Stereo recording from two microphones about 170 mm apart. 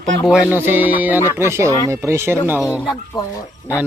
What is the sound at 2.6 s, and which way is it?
Speech, centre (ahead or behind).